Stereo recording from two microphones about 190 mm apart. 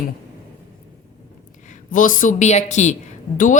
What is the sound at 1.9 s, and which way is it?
A woman's voice, 45° left (ahead or behind).